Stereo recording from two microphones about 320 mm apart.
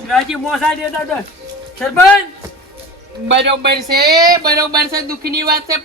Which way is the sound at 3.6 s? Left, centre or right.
Right.